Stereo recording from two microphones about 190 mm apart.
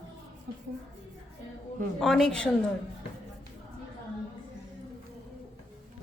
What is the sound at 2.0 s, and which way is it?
Speech, 5° left (ahead or behind).